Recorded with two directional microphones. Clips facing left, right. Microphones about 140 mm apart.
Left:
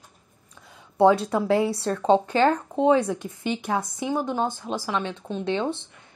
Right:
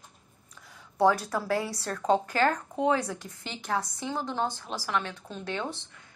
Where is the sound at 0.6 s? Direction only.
25° left (ahead or behind).